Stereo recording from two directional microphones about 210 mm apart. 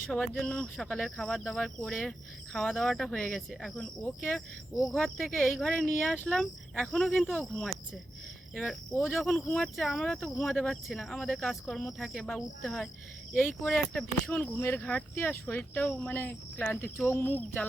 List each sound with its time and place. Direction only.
0.1 s speech: 5° left (ahead or behind)